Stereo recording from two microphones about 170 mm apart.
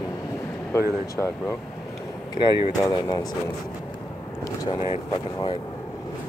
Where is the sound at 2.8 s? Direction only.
20° left (ahead or behind).